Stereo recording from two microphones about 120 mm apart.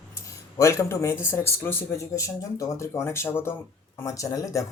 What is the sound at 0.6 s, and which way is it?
Speech, 25° left (ahead or behind).